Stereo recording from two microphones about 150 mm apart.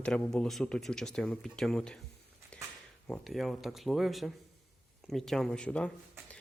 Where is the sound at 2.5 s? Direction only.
5° left (ahead or behind).